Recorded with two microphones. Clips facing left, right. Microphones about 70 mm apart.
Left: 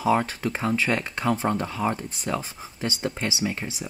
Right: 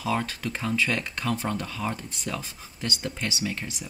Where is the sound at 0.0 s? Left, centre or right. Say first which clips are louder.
Left 6 dB; left.